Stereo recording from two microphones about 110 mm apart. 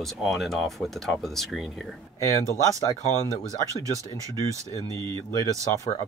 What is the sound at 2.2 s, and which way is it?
Speech, 30° left (ahead or behind).